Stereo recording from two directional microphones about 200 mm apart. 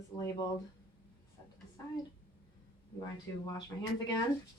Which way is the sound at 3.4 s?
20° left (ahead or behind).